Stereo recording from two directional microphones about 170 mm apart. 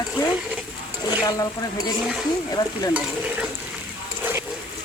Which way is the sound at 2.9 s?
5° right (ahead or behind).